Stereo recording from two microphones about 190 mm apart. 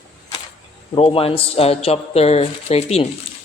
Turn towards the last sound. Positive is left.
turn(degrees=35)  # may be behind; listen again after turning